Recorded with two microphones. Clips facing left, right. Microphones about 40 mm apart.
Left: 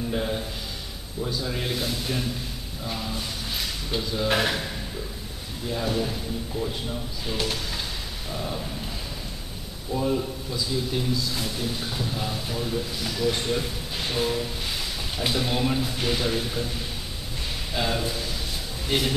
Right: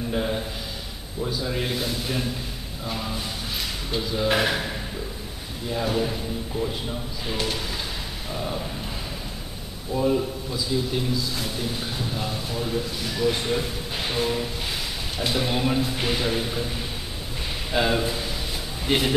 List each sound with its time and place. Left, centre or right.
0.1 s a sound: centre
1.2 s a man's voice: centre
9.9 s a man's voice: centre
17.7 s a man's voice: centre